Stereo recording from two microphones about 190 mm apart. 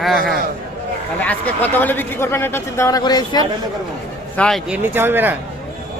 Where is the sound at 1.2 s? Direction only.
10° left (ahead or behind).